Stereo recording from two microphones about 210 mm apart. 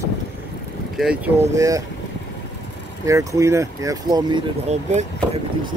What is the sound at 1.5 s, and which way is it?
Speech, 15° right (ahead or behind).